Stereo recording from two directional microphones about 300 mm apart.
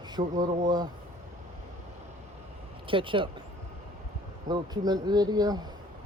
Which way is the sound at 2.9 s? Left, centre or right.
Centre.